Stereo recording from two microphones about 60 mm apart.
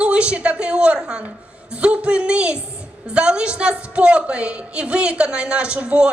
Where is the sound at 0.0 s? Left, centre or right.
Centre.